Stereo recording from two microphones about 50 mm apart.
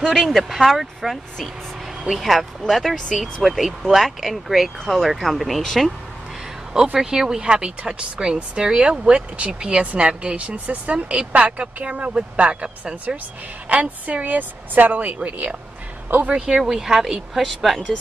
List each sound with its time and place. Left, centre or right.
0.0 s speech: centre
6.7 s a woman's voice: centre; by 16.3 s right
16.3 s speech: centre